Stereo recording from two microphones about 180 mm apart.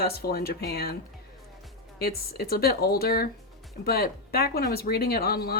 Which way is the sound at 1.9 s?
60° left (ahead or behind).